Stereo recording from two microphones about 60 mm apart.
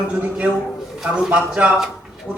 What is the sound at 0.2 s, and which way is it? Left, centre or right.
A man's voice, right.